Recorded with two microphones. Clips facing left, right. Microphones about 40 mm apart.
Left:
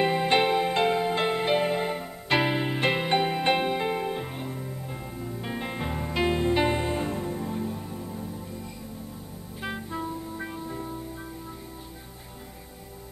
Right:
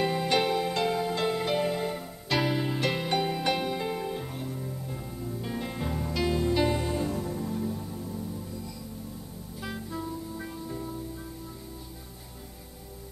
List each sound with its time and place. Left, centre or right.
0.0 s music: left
9.6 s music: left